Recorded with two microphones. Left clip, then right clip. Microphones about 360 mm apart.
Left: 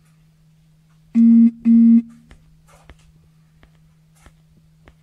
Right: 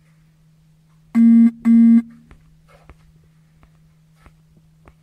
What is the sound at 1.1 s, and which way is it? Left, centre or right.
Busy signal, right.